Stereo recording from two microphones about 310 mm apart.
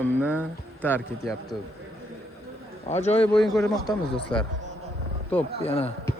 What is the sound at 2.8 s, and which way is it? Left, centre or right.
Speech, left.